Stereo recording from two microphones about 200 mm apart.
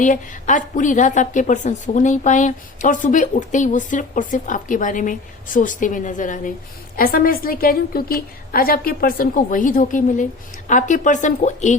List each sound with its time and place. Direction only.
0.0 s a woman's voice: 40° left (ahead or behind)